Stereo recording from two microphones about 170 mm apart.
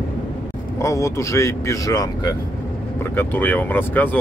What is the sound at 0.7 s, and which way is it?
Speech, 20° left (ahead or behind).